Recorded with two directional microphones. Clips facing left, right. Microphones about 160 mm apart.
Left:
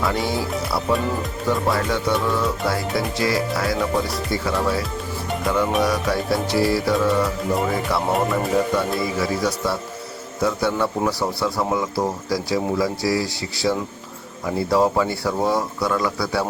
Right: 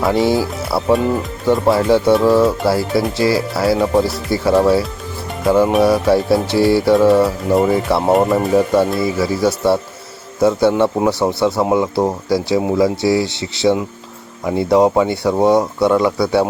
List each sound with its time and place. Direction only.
0.0 s speech: 30° right (ahead or behind)